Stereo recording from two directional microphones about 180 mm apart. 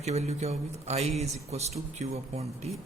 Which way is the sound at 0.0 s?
35° right (ahead or behind).